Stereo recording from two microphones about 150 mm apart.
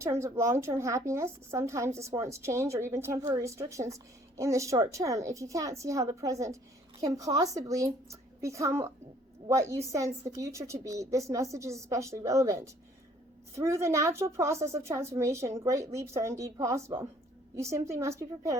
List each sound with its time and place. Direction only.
0.0 s a woman's voice: 20° right (ahead or behind)